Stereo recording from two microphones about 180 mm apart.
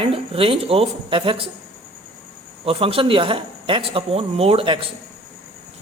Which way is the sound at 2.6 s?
30° right (ahead or behind).